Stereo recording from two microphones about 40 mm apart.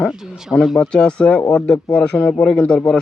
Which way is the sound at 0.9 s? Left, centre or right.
Left.